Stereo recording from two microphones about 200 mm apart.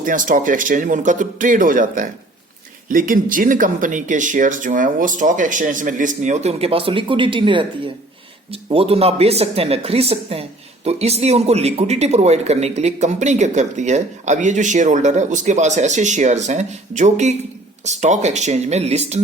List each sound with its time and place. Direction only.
0.0 s speech: 40° right (ahead or behind)